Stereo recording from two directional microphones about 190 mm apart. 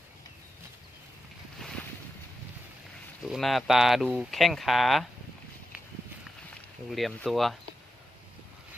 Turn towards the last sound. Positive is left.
turn(degrees=0)  # may be behind; listen again after turning